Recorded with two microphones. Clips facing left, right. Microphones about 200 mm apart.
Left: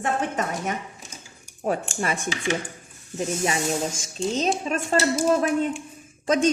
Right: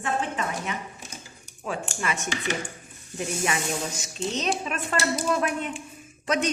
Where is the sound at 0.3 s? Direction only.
45° left (ahead or behind).